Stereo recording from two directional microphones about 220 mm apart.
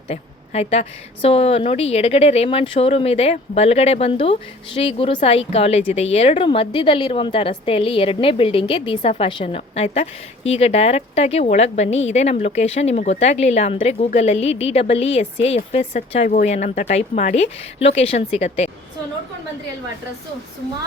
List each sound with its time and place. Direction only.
0.1 s a woman's voice: 30° left (ahead or behind)